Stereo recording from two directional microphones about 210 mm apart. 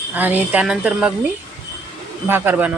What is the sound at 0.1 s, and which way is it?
Speech, 10° right (ahead or behind).